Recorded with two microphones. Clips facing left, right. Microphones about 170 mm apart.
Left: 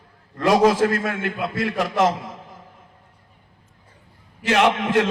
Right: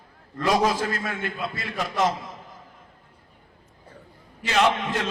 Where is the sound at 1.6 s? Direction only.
80° left.